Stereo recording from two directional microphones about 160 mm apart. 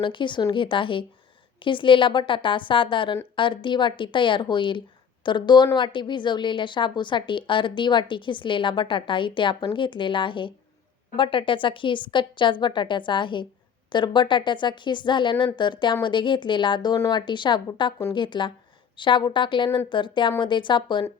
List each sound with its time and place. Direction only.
0.0 s a woman's voice: 30° left (ahead or behind)